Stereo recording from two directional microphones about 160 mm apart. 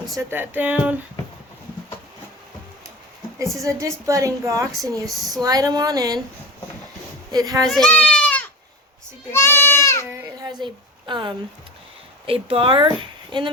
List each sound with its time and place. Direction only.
0.2 s speech: 15° right (ahead or behind)
3.6 s a woman's voice: 20° right (ahead or behind)
7.3 s a woman's voice: 25° right (ahead or behind)
7.7 s goat: 5° left (ahead or behind)
10.4 s a sound: 30° right (ahead or behind)
12.2 s a woman's voice: 35° right (ahead or behind)